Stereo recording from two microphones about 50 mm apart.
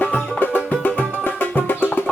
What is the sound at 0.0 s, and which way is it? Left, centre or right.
Music, left.